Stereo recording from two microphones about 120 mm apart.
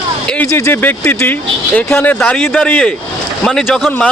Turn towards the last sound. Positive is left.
turn(degrees=5)  # may be behind; listen again after turning